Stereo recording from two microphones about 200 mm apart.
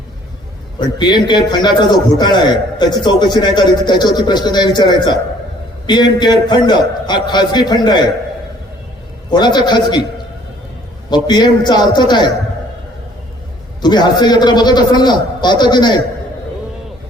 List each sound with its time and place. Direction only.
0.8 s a man's voice: 20° left (ahead or behind)
9.3 s a man's voice: 20° left (ahead or behind)
11.1 s a man's voice: 20° left (ahead or behind)
13.8 s a man's voice: 20° left (ahead or behind)